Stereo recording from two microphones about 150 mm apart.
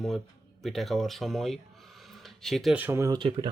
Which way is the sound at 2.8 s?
15° right (ahead or behind).